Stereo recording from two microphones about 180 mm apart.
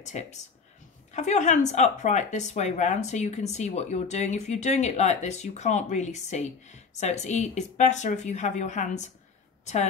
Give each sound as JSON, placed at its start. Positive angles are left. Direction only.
{"t": 0.0, "sound": "speech", "side_deg": 40}